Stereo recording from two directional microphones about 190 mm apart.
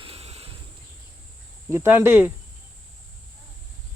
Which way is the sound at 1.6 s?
15° right (ahead or behind).